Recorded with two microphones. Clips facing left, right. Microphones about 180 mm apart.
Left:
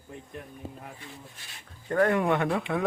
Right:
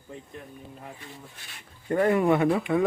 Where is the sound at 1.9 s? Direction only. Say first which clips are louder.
Right 2 dB; 10° right (ahead or behind).